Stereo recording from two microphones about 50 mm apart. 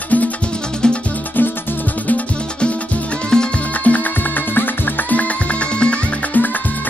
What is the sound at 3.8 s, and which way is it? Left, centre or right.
Music, left.